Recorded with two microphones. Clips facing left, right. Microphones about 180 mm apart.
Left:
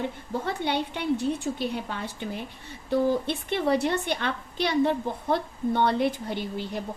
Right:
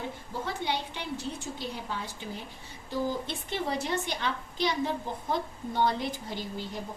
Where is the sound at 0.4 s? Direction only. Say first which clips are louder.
Left 4 dB; 60° left (ahead or behind).